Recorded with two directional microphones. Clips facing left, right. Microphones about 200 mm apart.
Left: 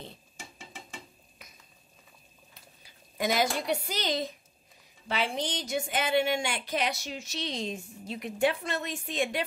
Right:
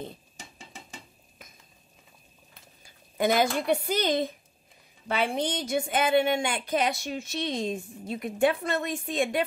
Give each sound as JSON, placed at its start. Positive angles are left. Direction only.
{"t": 2.8, "sound": "a woman's voice", "side_deg": -55}